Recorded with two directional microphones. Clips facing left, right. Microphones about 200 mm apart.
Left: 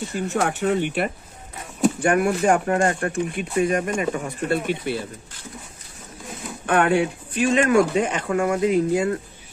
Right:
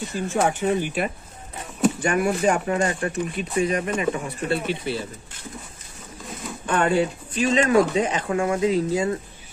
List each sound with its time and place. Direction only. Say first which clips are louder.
0.1 s speech: right 1 dB; 65° left (ahead or behind)
6.6 s speech: left 2 dB; 60° left (ahead or behind)